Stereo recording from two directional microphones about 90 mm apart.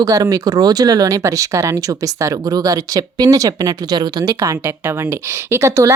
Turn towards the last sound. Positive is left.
turn(degrees=-35)  # may be behind; listen again after turning